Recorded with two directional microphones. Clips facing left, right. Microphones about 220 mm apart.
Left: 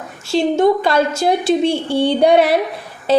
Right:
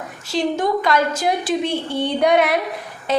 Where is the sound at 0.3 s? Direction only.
25° left (ahead or behind).